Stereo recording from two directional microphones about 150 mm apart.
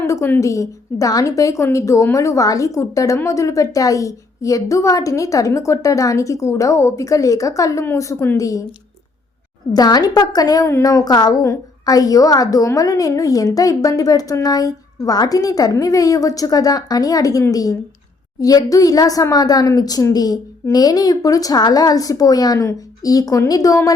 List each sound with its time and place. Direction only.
0.0 s a woman's voice: 15° left (ahead or behind)
9.7 s a woman's voice: 25° left (ahead or behind)